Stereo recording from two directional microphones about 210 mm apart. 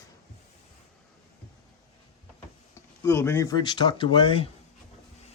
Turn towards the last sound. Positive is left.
turn(degrees=25)  # may be behind; listen again after turning